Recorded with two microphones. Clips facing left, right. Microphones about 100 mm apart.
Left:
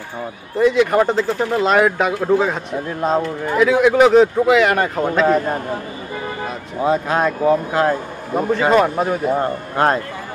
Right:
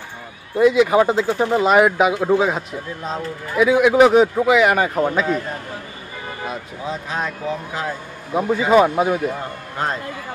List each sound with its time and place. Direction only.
0.6 s speech: 5° right (ahead or behind)
5.2 s a man's voice: 50° left (ahead or behind)
6.8 s speech: 55° left (ahead or behind)
8.3 s speech: 5° right (ahead or behind)
9.4 s speech: 60° left (ahead or behind)